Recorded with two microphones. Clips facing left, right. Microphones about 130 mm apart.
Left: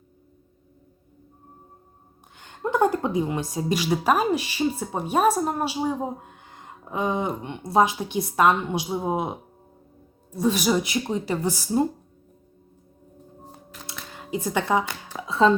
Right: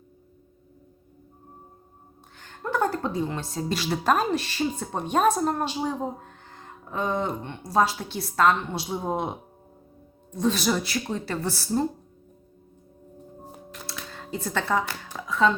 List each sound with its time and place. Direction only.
2.3 s a woman's voice: 15° left (ahead or behind)
13.4 s music: centre (ahead or behind)
14.1 s speech: 15° left (ahead or behind)
15.3 s speech: 30° left (ahead or behind)